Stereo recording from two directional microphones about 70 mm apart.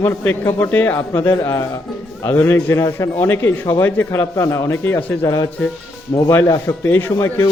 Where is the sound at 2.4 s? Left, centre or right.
Left.